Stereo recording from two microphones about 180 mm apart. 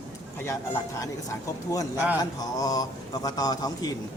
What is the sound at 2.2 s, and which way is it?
A man's voice, 20° left (ahead or behind).